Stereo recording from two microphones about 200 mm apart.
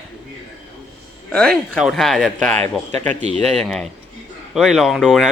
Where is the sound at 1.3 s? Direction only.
Centre (ahead or behind).